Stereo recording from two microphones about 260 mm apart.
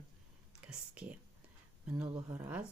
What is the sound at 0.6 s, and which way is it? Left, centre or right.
Whispering, centre.